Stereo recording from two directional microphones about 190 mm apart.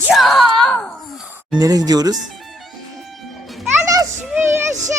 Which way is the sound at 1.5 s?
20° right (ahead or behind).